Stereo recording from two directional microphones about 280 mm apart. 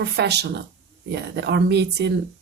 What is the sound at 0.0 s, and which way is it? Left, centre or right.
A woman's voice, right.